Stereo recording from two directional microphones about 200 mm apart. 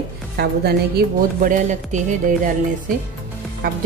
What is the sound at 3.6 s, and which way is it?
Speech, 45° right (ahead or behind).